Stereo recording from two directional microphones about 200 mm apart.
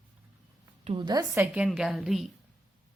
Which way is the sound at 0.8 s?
20° right (ahead or behind).